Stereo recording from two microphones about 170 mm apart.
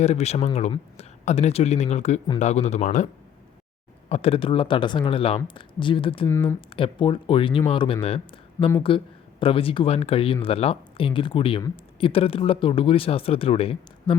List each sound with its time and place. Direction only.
0.0 s speech: 40° left (ahead or behind)
4.1 s speech: 35° left (ahead or behind)
6.2 s speech: 15° left (ahead or behind)
6.7 s speech: 30° left (ahead or behind)
8.6 s speech: 15° left (ahead or behind)
9.4 s speech: 30° left (ahead or behind)